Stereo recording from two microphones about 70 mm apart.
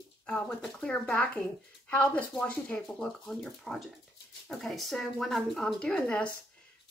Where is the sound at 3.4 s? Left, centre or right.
Centre.